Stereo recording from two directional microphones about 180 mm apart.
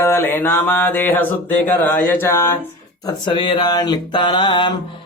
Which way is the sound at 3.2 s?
25° left (ahead or behind).